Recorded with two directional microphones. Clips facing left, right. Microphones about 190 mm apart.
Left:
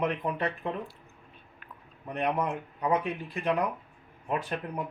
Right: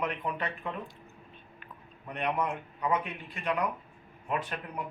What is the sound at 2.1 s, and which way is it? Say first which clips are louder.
Speech: left 2 dB; 35° left (ahead or behind).